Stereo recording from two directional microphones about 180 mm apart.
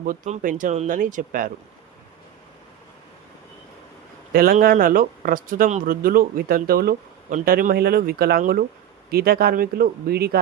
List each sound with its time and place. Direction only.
0.0 s speech: 50° right (ahead or behind)
4.3 s speech: 55° right (ahead or behind)